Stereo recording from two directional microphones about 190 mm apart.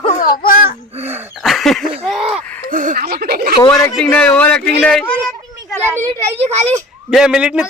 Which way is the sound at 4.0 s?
5° left (ahead or behind).